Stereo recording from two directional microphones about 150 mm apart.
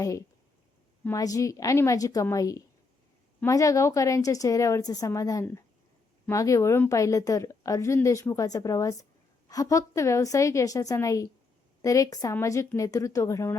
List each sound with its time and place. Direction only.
0.0 s a woman's voice: 20° left (ahead or behind)